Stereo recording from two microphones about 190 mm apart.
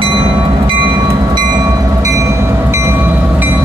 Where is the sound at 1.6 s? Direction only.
15° right (ahead or behind).